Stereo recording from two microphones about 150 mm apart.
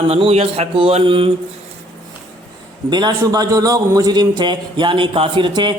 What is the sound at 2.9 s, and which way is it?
A man's voice, 30° right (ahead or behind).